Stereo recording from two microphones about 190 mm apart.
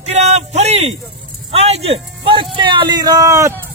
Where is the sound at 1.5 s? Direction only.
30° right (ahead or behind).